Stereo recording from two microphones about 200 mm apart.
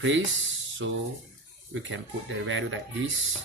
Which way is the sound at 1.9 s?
75° right (ahead or behind).